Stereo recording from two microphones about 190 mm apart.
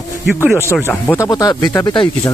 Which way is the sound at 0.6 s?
10° left (ahead or behind).